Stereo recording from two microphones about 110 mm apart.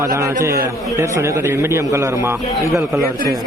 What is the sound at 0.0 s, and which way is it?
A man's voice, 25° right (ahead or behind).